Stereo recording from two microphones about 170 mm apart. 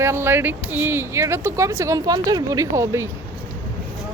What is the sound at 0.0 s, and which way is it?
Speech, 15° right (ahead or behind).